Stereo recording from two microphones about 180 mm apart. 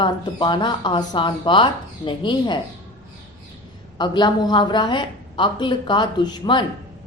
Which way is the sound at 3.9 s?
25° left (ahead or behind).